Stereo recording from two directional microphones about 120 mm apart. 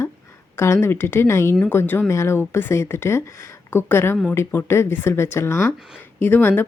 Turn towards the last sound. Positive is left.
turn(degrees=15)  # may be behind; listen again after turning